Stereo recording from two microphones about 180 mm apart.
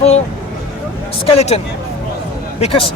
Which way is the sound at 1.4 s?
35° left (ahead or behind).